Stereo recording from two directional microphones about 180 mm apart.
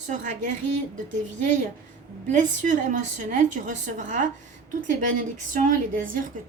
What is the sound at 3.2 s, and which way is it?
A woman's voice, 45° right (ahead or behind).